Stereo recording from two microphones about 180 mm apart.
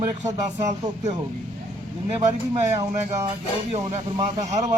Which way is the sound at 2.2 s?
35° right (ahead or behind).